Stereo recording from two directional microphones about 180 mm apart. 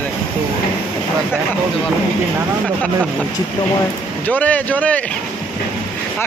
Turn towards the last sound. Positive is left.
turn(degrees=10)  # may be behind; listen again after turning